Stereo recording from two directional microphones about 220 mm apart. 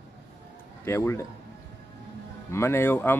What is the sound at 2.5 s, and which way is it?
Speech, 10° left (ahead or behind).